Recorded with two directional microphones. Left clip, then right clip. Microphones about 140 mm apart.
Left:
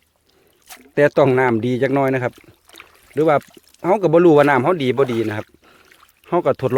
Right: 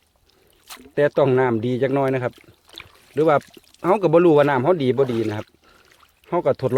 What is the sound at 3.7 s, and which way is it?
Speech, 15° left (ahead or behind).